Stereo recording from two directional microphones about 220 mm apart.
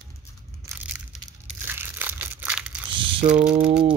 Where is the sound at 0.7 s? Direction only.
5° right (ahead or behind).